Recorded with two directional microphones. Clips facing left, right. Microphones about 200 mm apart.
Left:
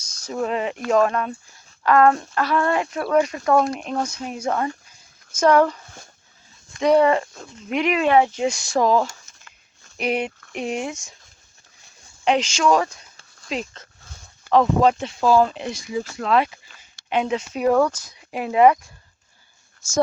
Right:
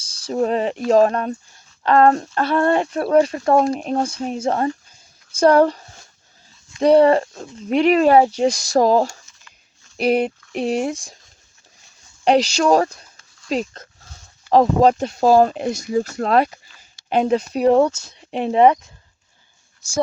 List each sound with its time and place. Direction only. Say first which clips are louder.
0.0 s a sound: right 5 dB; 30° right (ahead or behind)
0.9 s speech: right 4 dB; 35° right (ahead or behind)
12.2 s speech: right 4 dB; 35° right (ahead or behind)